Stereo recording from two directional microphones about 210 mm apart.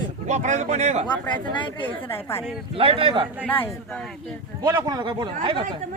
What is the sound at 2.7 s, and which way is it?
Speech, 25° right (ahead or behind).